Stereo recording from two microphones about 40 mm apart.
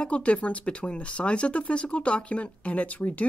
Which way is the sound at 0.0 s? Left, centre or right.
Left.